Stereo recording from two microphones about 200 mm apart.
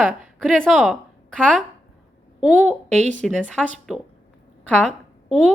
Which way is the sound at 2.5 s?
10° right (ahead or behind).